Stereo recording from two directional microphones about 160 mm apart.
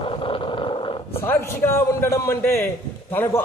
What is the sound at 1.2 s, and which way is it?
A man's voice, 15° left (ahead or behind).